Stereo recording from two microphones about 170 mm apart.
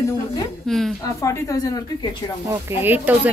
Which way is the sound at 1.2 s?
20° left (ahead or behind).